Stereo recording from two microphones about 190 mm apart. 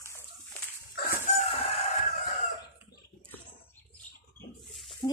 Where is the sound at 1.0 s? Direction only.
55° left (ahead or behind).